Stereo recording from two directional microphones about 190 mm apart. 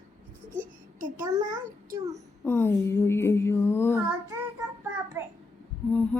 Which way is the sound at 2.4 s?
10° left (ahead or behind).